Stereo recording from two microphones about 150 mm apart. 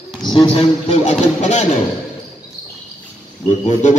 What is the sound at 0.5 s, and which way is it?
Speech, 50° left (ahead or behind).